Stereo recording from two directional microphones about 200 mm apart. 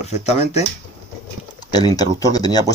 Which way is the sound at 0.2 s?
35° left (ahead or behind).